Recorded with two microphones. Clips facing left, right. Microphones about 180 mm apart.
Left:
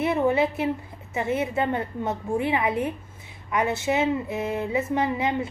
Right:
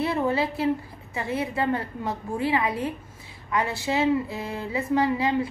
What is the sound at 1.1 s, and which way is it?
A woman's voice, 25° left (ahead or behind).